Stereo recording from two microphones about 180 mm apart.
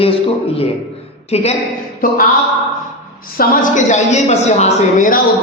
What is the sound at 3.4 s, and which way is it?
A woman's voice, 45° left (ahead or behind).